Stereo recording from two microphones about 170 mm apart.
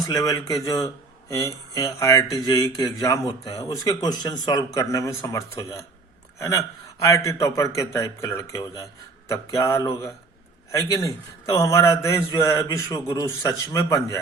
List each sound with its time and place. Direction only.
0.0 s a man's voice: 20° left (ahead or behind)